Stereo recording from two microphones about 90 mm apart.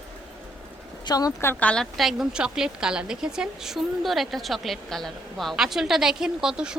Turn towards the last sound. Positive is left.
turn(degrees=-10)  # may be behind; listen again after turning